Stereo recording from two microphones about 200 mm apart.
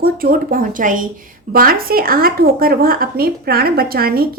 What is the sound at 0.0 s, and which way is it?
Speech, 45° right (ahead or behind).